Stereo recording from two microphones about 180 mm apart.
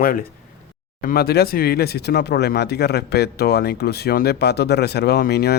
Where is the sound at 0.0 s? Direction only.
55° left (ahead or behind).